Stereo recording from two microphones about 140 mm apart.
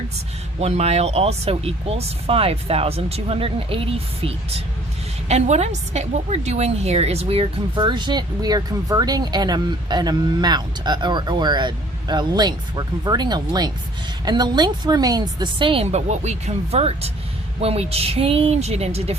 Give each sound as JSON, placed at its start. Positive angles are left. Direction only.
{"t": 0.6, "sound": "speech", "side_deg": -50}
{"t": 7.8, "sound": "speech", "side_deg": -35}